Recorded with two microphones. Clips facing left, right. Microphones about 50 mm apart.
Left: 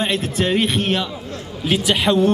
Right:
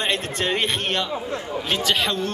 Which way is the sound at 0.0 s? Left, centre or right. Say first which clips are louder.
Left 4 dB; centre.